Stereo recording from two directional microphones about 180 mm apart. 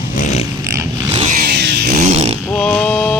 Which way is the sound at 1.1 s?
40° right (ahead or behind).